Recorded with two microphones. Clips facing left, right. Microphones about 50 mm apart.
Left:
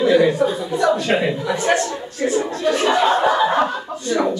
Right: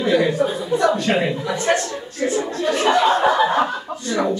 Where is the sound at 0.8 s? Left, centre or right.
Centre.